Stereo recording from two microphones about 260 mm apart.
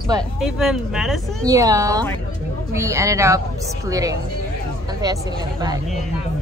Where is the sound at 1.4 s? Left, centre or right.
Centre.